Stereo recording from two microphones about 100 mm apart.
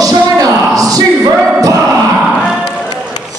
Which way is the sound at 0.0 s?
35° right (ahead or behind).